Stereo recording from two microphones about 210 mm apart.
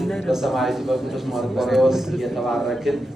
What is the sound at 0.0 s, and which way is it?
A man's voice, centre (ahead or behind).